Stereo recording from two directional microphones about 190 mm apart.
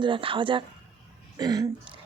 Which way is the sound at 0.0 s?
25° right (ahead or behind).